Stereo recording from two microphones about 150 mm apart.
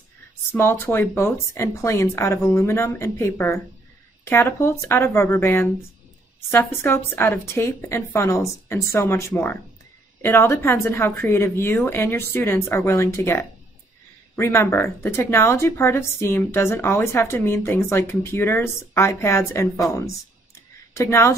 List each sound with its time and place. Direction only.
0.5 s speech: 15° left (ahead or behind)
20.9 s speech: 20° left (ahead or behind)